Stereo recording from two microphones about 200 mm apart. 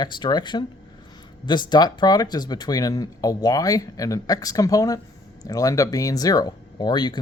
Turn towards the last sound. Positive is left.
turn(degrees=20)  # may be behind; listen again after turning